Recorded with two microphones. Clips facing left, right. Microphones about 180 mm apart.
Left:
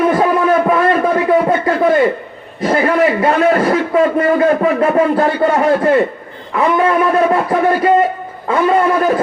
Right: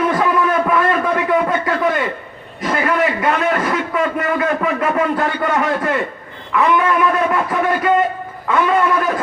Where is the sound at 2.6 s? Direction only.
35° left (ahead or behind).